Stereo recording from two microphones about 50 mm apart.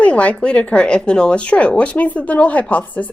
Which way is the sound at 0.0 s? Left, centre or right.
Left.